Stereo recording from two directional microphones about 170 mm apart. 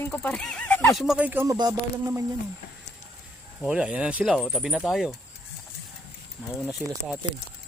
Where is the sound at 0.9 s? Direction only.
5° right (ahead or behind).